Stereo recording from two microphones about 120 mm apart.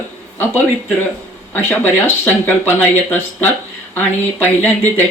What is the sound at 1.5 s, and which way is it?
Speech, 20° left (ahead or behind).